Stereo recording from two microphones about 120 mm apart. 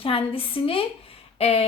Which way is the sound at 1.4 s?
55° left (ahead or behind).